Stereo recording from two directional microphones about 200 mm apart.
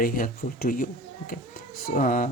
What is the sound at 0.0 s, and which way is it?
Speech, 45° left (ahead or behind).